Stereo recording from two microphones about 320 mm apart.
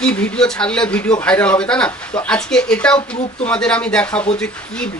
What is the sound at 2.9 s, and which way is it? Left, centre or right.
Speech, centre.